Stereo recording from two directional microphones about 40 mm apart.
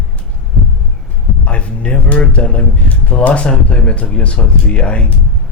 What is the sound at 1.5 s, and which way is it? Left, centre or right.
Speech, left.